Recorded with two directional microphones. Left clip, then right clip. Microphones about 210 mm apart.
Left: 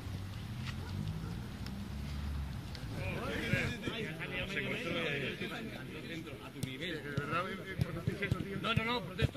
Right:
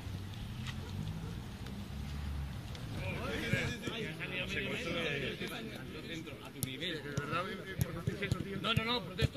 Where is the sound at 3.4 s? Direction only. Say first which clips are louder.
Left 1 dB; 15° right (ahead or behind).